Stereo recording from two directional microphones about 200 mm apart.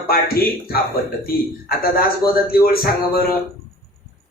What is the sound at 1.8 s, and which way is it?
A man's voice, 50° left (ahead or behind).